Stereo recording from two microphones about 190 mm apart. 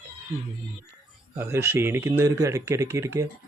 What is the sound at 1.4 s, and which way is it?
Speech, 10° right (ahead or behind).